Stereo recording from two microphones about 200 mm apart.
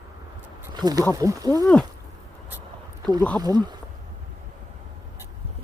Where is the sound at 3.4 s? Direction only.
20° right (ahead or behind).